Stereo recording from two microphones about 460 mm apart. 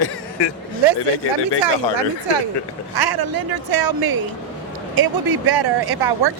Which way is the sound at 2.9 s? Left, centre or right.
Right.